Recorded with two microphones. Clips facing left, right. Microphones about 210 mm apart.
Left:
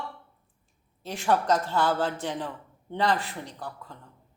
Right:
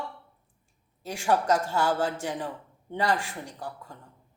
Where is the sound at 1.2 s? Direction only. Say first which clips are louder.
Even; 40° right (ahead or behind).